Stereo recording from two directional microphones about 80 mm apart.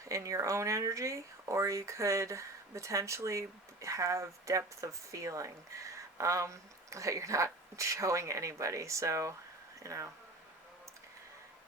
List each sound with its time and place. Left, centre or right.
0.0 s speech: right